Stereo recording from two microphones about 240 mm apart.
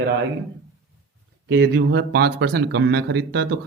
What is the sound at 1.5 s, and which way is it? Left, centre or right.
A man's voice, right.